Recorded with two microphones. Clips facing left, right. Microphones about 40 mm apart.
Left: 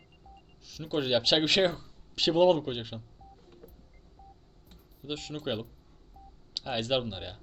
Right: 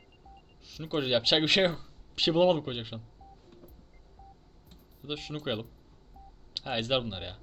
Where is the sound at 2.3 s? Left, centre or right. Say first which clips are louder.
Left 1 dB; centre.